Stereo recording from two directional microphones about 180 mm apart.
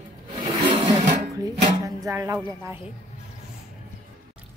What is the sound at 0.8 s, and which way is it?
Music, 25° right (ahead or behind).